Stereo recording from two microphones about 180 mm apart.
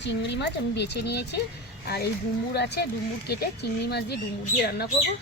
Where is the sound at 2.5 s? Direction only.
65° left (ahead or behind).